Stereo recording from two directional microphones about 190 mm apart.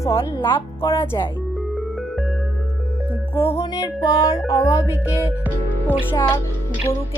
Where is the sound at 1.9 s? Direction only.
Centre (ahead or behind).